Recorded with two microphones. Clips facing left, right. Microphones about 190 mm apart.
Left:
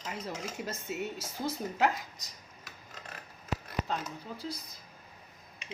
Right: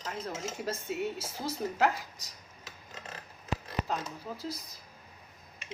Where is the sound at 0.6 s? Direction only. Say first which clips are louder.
Right 5 dB; centre (ahead or behind).